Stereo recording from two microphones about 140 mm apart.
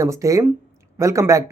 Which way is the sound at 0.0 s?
25° right (ahead or behind).